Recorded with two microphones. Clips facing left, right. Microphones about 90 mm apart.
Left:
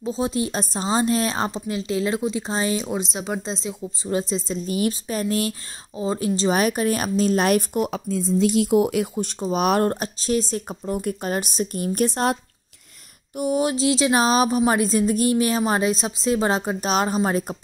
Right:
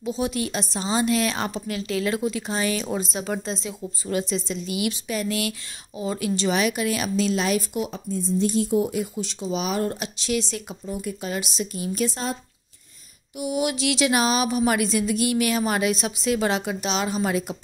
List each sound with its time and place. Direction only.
0.0 s a woman's voice: 30° left (ahead or behind)
2.8 s a woman's voice: 20° left (ahead or behind); by 7.9 s 55° left (ahead or behind)
7.9 s speech: 90° left; by 9.1 s 70° left (ahead or behind)
9.1 s speech: 50° left (ahead or behind)
10.9 s speech: 55° left (ahead or behind)
13.4 s a woman's voice: 35° left (ahead or behind)